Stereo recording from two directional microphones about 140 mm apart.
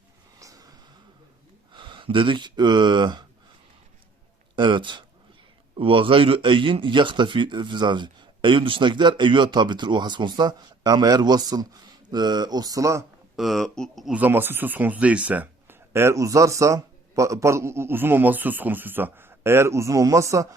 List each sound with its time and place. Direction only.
0.3 s a sound: 25° right (ahead or behind)
1.7 s speech: 35° right (ahead or behind)
4.5 s speech: 35° right (ahead or behind)
13.3 s speech: centre (ahead or behind); by 20.5 s 25° right (ahead or behind)